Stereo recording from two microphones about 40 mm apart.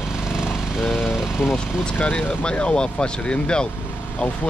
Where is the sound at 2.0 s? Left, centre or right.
Left.